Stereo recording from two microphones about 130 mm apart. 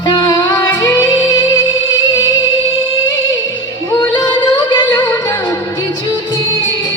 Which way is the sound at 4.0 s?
35° left (ahead or behind).